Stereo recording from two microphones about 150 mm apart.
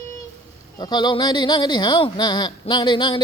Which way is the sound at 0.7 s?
30° left (ahead or behind).